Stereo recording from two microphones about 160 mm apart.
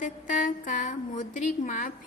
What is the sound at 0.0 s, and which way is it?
A woman's voice, 55° left (ahead or behind).